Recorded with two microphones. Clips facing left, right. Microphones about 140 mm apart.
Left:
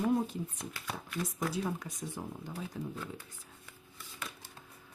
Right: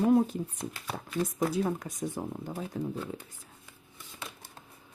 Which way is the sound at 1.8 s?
50° right (ahead or behind).